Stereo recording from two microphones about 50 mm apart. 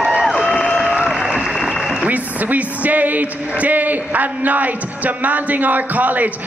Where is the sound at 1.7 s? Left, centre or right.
Centre.